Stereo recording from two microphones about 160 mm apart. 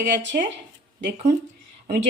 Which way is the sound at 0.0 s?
90° right.